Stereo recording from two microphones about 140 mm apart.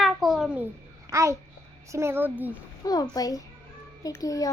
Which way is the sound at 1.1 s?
20° right (ahead or behind).